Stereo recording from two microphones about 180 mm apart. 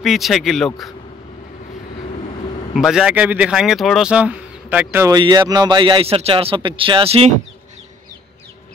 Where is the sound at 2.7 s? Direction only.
5° right (ahead or behind); by 7.3 s 30° right (ahead or behind).